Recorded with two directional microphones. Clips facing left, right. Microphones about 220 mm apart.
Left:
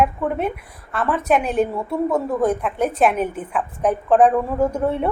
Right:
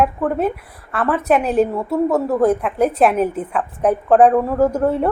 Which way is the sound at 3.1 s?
30° right (ahead or behind).